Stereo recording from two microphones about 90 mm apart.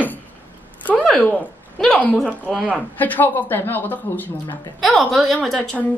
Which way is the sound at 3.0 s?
20° left (ahead or behind).